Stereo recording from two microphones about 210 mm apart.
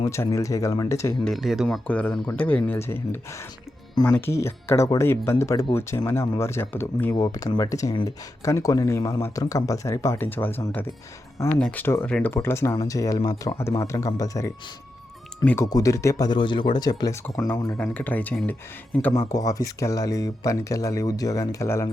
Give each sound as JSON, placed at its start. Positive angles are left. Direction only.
{"t": 0.0, "sound": "speech", "side_deg": 15}
{"t": 1.3, "sound": "speech", "side_deg": 0}